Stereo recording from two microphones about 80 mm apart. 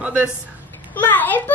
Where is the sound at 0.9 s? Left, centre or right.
Left.